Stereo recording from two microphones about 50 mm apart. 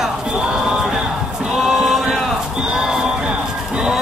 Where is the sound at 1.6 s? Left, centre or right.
Centre.